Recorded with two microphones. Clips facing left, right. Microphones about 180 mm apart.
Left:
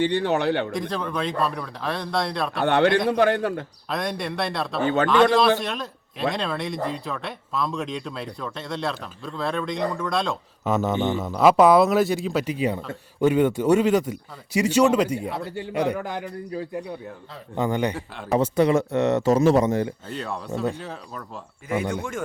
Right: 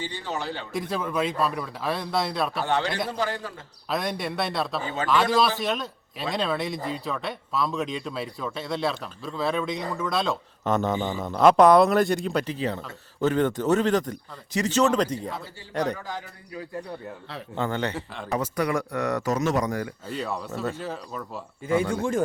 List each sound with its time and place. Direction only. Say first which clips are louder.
0.0 s speech: left 10 dB; 65° left (ahead or behind)
0.7 s speech: left 1 dB; 5° right (ahead or behind)
2.6 s speech: left 11 dB; 60° left (ahead or behind)
3.8 s speech: even; centre (ahead or behind)
4.8 s a man's voice: left 9 dB; 65° left (ahead or behind)
5.5 s a man's voice: right 1 dB; centre (ahead or behind)
16.0 s speech: left 6 dB; 60° left (ahead or behind)
17.5 s speech: left 4 dB; 15° left (ahead or behind)
17.9 s speech: left 4 dB; centre (ahead or behind)
18.3 s speech: left 7 dB; 25° left (ahead or behind)
20.1 s speech: even; centre (ahead or behind)
21.8 s a man's voice: right 3 dB; 30° right (ahead or behind)